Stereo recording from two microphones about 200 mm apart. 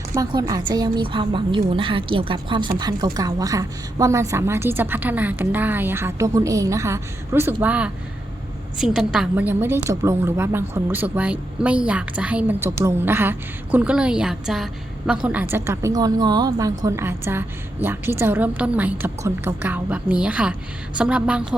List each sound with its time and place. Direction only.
0.1 s a woman's voice: 20° right (ahead or behind)